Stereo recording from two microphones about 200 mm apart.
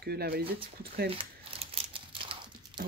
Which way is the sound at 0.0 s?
50° right (ahead or behind).